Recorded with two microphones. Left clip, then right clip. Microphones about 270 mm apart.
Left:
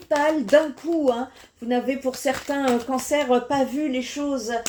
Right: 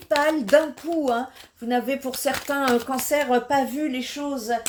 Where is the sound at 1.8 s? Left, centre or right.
Right.